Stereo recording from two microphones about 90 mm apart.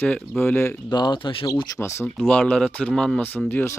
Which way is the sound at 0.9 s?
55° left (ahead or behind).